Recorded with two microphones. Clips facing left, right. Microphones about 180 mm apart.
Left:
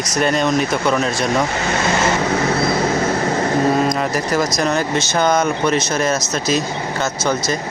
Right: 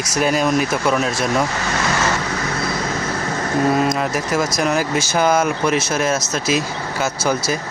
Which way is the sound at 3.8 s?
5° right (ahead or behind).